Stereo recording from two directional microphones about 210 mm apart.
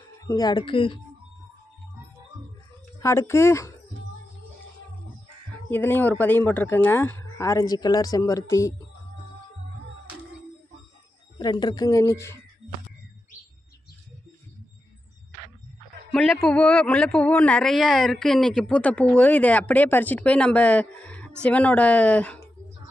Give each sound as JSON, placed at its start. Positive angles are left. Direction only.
{"t": 0.2, "sound": "speech", "side_deg": 15}
{"t": 3.0, "sound": "speech", "side_deg": 15}
{"t": 5.7, "sound": "speech", "side_deg": 10}
{"t": 11.3, "sound": "speech", "side_deg": 20}
{"t": 16.1, "sound": "a man's voice", "side_deg": 5}